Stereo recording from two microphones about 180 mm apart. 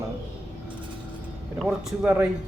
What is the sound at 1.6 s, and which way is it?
Speech, centre (ahead or behind).